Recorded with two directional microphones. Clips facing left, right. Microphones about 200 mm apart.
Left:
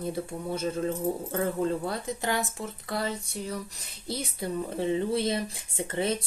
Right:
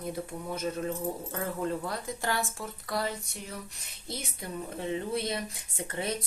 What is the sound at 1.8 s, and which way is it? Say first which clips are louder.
Speech: left 3 dB; 20° left (ahead or behind).